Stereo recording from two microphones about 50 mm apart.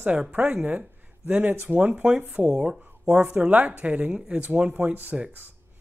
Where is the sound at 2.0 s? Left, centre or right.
Right.